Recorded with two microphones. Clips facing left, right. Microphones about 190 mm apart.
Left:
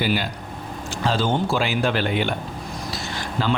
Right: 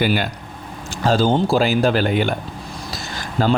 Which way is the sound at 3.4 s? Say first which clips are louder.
Right 5 dB; 45° right (ahead or behind).